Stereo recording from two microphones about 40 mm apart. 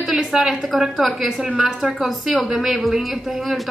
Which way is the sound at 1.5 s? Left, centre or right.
Right.